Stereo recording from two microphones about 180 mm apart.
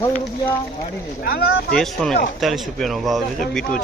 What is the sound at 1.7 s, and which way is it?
Speech, centre (ahead or behind).